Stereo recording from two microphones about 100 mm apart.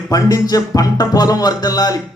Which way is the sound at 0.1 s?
35° left (ahead or behind).